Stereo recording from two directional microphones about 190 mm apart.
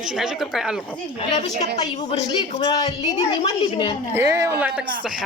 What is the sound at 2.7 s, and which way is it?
Speech, 20° left (ahead or behind).